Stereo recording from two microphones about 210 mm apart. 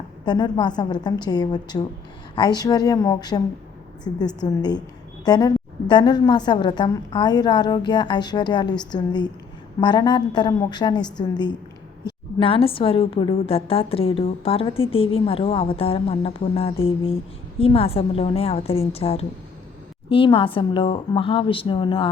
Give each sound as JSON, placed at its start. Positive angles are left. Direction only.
{"t": 0.3, "sound": "a woman's voice", "side_deg": 20}